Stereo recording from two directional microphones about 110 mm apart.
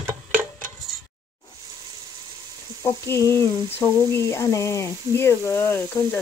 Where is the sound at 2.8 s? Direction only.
25° left (ahead or behind).